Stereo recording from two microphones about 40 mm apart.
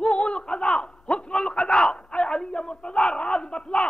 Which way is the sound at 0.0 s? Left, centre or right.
Left.